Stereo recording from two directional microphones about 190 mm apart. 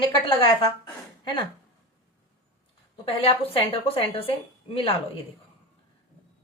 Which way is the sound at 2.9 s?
30° left (ahead or behind).